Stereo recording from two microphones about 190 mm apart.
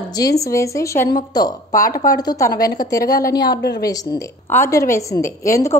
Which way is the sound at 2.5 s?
55° left (ahead or behind).